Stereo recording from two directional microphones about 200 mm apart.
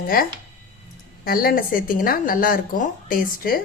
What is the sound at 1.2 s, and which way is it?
A woman's voice, 45° left (ahead or behind).